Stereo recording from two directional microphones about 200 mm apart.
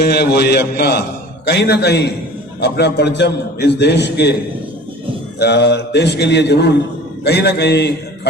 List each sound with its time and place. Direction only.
0.0 s a man's voice: 55° left (ahead or behind)
5.4 s a man's voice: 55° left (ahead or behind)